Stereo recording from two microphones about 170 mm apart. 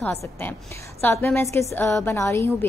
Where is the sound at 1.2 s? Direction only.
15° left (ahead or behind).